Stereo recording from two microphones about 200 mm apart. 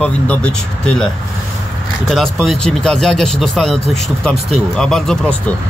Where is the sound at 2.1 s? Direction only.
Centre (ahead or behind).